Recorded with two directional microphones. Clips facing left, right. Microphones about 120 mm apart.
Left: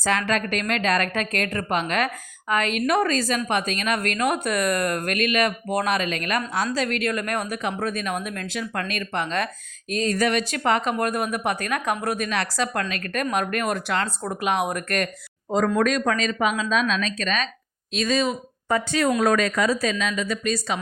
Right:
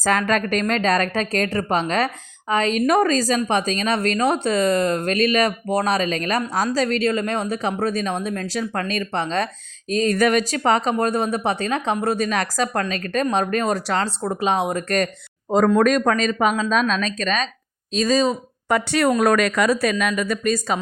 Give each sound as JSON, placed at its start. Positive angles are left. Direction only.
{"t": 0.0, "sound": "a woman's voice", "side_deg": -45}
{"t": 10.0, "sound": "speech", "side_deg": -50}
{"t": 12.3, "sound": "a woman's voice", "side_deg": -40}
{"t": 18.7, "sound": "a woman's voice", "side_deg": -65}